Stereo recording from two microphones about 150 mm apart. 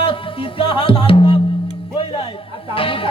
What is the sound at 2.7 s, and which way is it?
Music, 35° left (ahead or behind).